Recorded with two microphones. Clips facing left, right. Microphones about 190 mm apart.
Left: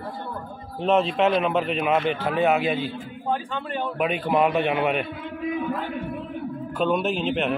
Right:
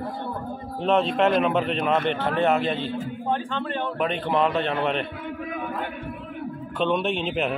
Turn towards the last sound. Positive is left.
turn(degrees=0)  # may be behind; listen again after turning